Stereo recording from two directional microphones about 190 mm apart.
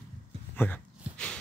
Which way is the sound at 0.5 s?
10° left (ahead or behind).